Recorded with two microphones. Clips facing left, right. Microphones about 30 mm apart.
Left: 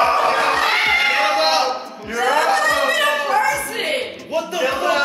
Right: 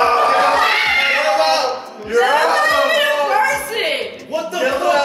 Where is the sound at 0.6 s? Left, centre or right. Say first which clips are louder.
Right 2 dB; centre.